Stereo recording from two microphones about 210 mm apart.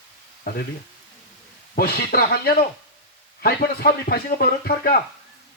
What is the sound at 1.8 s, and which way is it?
Speech, 50° left (ahead or behind).